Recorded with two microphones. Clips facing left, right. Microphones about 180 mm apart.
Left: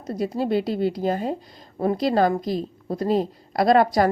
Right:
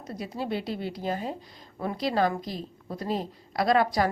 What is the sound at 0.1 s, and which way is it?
A woman's voice, 40° left (ahead or behind).